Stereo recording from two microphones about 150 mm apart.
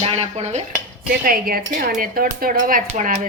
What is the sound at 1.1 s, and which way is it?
Speech, 75° right (ahead or behind).